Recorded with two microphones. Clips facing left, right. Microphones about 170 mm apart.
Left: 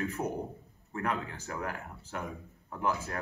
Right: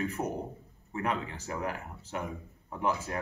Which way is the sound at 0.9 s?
10° right (ahead or behind).